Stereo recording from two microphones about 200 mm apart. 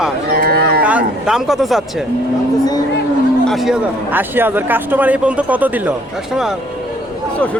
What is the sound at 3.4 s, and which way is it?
Speech, centre (ahead or behind).